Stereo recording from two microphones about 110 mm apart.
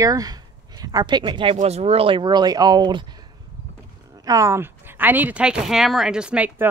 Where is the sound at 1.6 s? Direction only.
75° right (ahead or behind); by 3.1 s 45° right (ahead or behind).